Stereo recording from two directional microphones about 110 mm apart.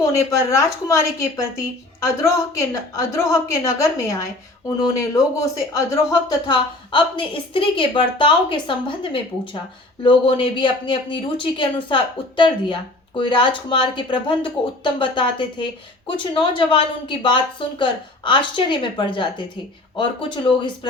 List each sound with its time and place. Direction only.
0.1 s a woman's voice: 25° left (ahead or behind)
6.5 s speech: 45° left (ahead or behind)